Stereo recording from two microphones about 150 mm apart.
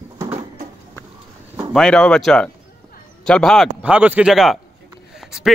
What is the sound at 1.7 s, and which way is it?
A man's voice, 5° left (ahead or behind).